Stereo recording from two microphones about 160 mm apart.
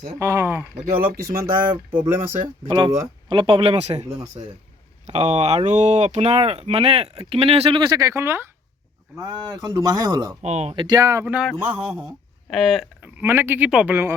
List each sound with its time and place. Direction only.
0.2 s speech: 15° right (ahead or behind)
1.2 s speech: 70° right (ahead or behind)
2.6 s speech: 25° right (ahead or behind)
7.8 s speech: 25° right (ahead or behind)
10.4 s speech: 45° right (ahead or behind)
10.8 s speech: 20° right (ahead or behind)
11.3 s speech: 5° right (ahead or behind)
13.0 s speech: 15° right (ahead or behind)